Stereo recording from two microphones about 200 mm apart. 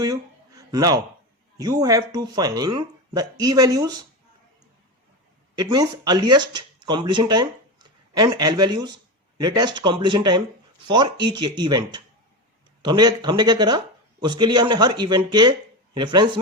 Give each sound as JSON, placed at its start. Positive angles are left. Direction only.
{"t": 0.0, "sound": "a sound", "side_deg": -20}
{"t": 1.5, "sound": "speech", "side_deg": -20}
{"t": 5.5, "sound": "speech", "side_deg": -20}